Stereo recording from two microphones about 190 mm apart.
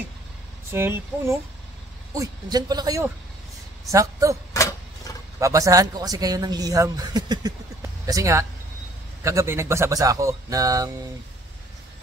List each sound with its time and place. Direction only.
0.7 s speech: 15° right (ahead or behind)
4.6 s a sound: 15° left (ahead or behind)
5.4 s speech: 15° right (ahead or behind)